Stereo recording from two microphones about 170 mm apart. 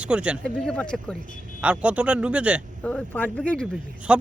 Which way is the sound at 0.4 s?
5° left (ahead or behind).